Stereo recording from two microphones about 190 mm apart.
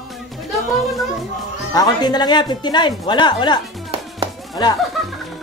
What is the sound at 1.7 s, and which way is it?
A woman's voice, 20° left (ahead or behind).